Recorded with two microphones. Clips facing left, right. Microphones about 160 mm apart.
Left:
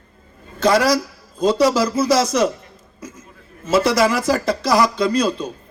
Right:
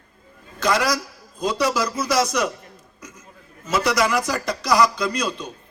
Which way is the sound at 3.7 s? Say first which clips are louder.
Left 4 dB; 30° left (ahead or behind).